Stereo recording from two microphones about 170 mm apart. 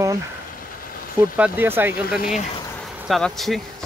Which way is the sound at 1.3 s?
10° right (ahead or behind).